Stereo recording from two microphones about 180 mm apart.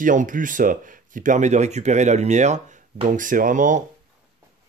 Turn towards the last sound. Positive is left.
turn(degrees=-45)  # may be behind; listen again after turning